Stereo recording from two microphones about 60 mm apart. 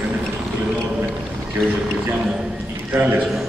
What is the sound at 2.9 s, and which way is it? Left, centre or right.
Chant, right.